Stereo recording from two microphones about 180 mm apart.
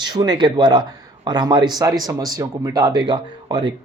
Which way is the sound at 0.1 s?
20° right (ahead or behind).